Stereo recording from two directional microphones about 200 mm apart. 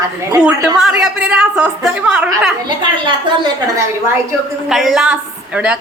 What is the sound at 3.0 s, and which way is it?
Speech, 20° right (ahead or behind).